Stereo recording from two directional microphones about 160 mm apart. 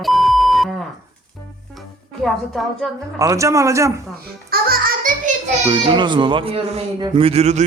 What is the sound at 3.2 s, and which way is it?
Speech, 20° right (ahead or behind).